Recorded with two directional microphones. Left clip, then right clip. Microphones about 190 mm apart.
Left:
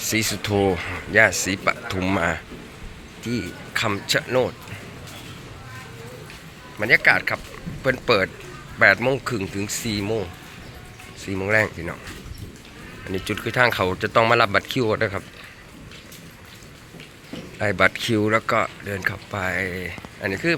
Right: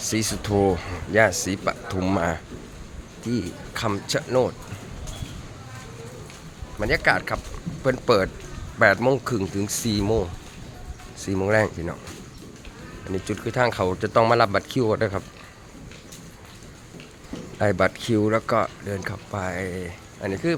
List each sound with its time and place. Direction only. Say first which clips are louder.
0.0 s speech: left 3 dB; 10° right (ahead or behind)
6.7 s speech: left 4 dB; 15° right (ahead or behind)
13.1 s speech: left 2 dB; 10° right (ahead or behind)
17.6 s speech: left 2 dB; 15° right (ahead or behind)